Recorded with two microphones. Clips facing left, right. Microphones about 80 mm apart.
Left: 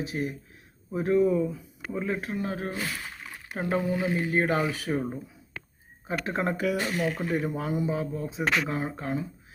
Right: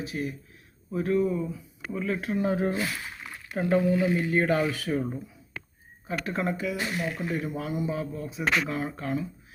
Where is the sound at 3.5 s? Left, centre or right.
Left.